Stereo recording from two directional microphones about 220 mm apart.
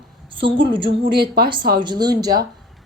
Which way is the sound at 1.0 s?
45° right (ahead or behind).